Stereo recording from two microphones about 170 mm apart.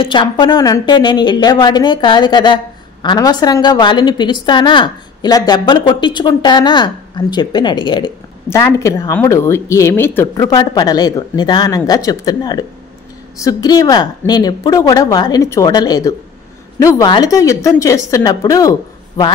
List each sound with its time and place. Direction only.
0.0 s a woman's voice: 30° left (ahead or behind)
8.5 s a woman's voice: 15° left (ahead or behind)